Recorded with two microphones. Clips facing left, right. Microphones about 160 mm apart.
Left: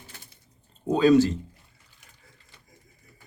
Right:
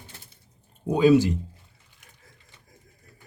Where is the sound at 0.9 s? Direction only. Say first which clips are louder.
Even; 15° right (ahead or behind).